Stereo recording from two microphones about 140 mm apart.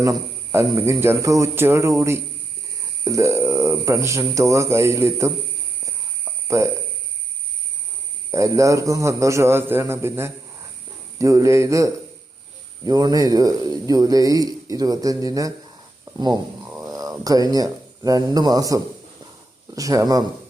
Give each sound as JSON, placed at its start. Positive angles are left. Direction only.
{"t": 0.0, "sound": "speech", "side_deg": -25}
{"t": 6.5, "sound": "speech", "side_deg": -20}
{"t": 8.3, "sound": "speech", "side_deg": -20}
{"t": 16.6, "sound": "a sound", "side_deg": -20}
{"t": 17.0, "sound": "speech", "side_deg": -25}